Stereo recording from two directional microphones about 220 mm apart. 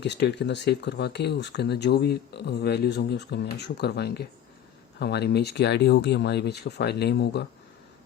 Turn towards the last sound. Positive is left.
turn(degrees=50)  # may be behind; listen again after turning